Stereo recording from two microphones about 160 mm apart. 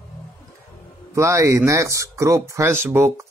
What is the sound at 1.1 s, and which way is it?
Speech, 20° right (ahead or behind).